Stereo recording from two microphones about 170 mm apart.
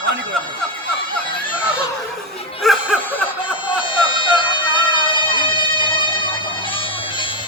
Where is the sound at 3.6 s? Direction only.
30° left (ahead or behind).